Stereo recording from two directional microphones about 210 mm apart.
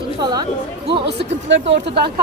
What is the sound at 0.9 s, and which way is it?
A woman's voice, 50° right (ahead or behind).